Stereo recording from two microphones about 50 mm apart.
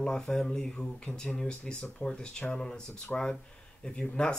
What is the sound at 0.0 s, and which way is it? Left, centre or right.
Speech, centre.